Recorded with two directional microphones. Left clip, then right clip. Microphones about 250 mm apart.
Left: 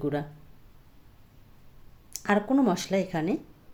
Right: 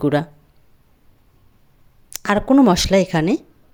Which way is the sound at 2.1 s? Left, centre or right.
Right.